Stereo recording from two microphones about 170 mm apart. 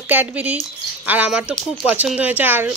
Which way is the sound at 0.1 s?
10° right (ahead or behind).